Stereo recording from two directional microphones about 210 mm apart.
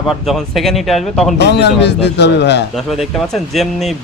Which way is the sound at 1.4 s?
55° left (ahead or behind).